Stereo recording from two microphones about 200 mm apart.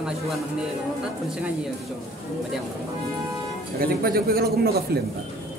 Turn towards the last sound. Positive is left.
turn(degrees=-50)  # may be behind; listen again after turning